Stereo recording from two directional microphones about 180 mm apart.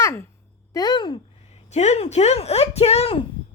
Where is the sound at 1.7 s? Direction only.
40° left (ahead or behind).